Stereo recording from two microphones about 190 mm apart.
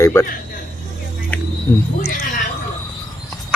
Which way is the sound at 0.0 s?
15° left (ahead or behind).